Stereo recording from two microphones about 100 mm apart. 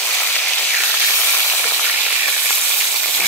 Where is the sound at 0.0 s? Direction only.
10° left (ahead or behind).